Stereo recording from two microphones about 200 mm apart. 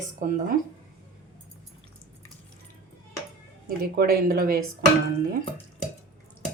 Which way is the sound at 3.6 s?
50° right (ahead or behind).